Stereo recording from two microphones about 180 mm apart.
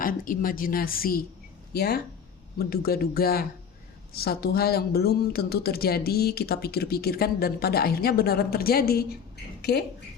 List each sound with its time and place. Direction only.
0.0 s a woman's voice: 50° left (ahead or behind)